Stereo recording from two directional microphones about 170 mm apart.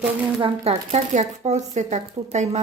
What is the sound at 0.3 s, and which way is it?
Speech, 35° right (ahead or behind).